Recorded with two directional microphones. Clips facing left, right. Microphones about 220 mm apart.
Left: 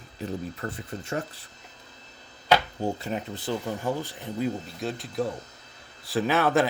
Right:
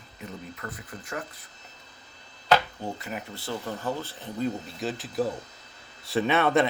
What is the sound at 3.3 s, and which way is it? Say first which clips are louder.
Speech: left 3 dB; 15° left (ahead or behind).